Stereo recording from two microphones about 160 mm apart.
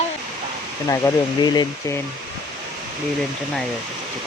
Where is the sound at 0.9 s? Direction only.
25° left (ahead or behind).